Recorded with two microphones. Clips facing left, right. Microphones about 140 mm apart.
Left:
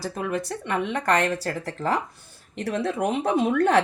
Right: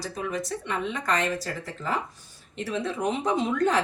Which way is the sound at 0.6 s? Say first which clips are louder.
Left 6 dB; 65° left (ahead or behind).